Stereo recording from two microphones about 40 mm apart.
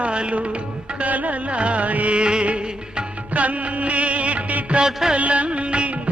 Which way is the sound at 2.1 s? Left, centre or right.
Right.